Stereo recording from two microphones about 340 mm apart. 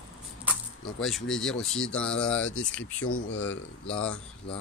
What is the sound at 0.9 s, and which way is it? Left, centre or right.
Speech, centre.